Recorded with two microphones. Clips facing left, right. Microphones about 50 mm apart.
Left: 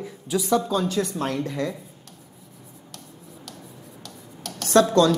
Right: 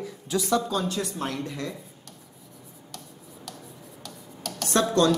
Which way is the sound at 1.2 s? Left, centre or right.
Left.